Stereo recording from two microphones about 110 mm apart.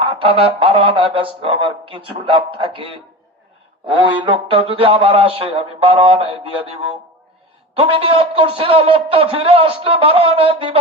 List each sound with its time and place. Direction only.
0.0 s speech: 55° right (ahead or behind)
4.0 s a man's voice: 55° right (ahead or behind)
7.8 s a man's voice: 55° right (ahead or behind)